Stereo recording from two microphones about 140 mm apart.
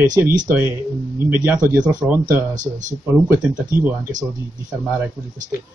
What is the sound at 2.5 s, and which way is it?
Speech, 65° right (ahead or behind).